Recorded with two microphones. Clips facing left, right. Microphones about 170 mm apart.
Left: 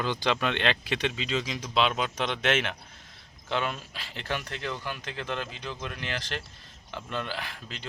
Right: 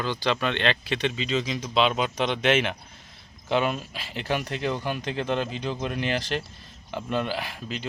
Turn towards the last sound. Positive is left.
turn(degrees=-15)  # may be behind; listen again after turning